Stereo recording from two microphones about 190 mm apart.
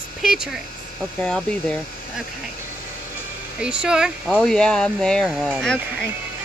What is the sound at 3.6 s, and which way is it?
Speech, 5° right (ahead or behind).